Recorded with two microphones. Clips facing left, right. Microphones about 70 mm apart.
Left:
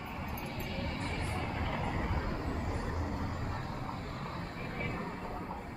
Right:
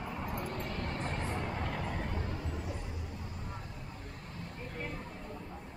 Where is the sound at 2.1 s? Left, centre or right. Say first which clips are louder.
Left 3 dB; left.